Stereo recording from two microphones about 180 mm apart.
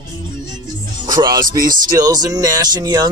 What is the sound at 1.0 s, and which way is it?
Speech, 20° right (ahead or behind).